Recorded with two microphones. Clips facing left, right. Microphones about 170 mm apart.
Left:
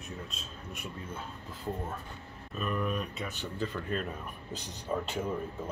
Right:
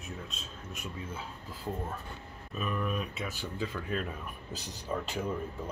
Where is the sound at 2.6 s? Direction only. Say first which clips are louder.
Left 1 dB; centre (ahead or behind).